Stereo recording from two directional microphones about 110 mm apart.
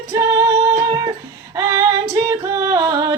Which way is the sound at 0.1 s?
35° right (ahead or behind).